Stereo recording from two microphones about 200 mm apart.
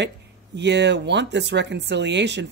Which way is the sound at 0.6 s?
60° right (ahead or behind).